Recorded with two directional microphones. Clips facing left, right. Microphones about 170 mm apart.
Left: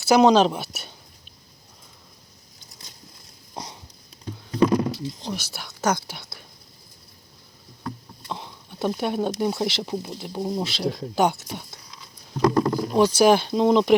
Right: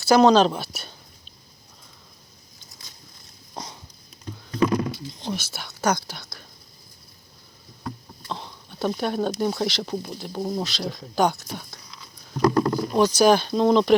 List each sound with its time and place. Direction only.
0.0 s speech: 15° left (ahead or behind)
3.5 s dog: 10° left (ahead or behind)
4.5 s a sound: 15° left (ahead or behind)
5.2 s speech: centre (ahead or behind)
5.8 s speech: 25° left (ahead or behind)
8.2 s a sound: 15° left (ahead or behind)
9.0 s speech: 20° left (ahead or behind)
9.8 s speech: 10° left (ahead or behind)
10.6 s speech: 25° left (ahead or behind)
12.5 s a sound: 10° left (ahead or behind)
13.0 s speech: 30° left (ahead or behind)